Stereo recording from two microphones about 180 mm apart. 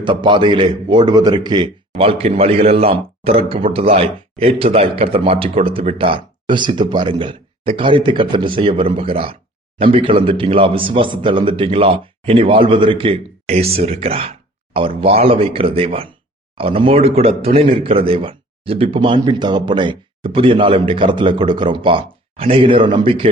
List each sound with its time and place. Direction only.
0.0 s a man's voice: 25° right (ahead or behind)